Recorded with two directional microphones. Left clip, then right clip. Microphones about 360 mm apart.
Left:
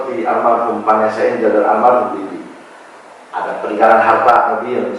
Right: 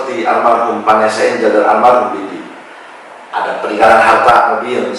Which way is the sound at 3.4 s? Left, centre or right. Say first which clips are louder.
Right 3 dB; centre.